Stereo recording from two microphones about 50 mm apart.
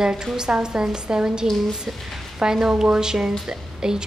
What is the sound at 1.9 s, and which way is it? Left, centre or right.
A woman's voice, centre.